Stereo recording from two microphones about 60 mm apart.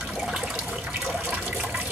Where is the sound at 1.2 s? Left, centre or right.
Right.